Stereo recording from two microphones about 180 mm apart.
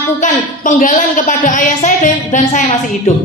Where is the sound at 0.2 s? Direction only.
45° left (ahead or behind).